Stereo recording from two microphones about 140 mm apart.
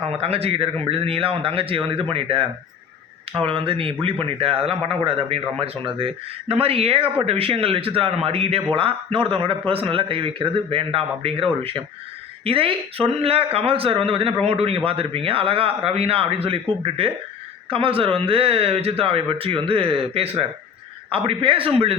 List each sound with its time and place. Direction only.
0.0 s a man's voice: 45° right (ahead or behind)
12.5 s a man's voice: 40° right (ahead or behind)